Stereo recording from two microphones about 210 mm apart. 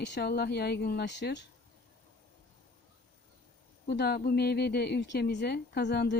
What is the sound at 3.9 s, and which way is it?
Speech, 50° left (ahead or behind).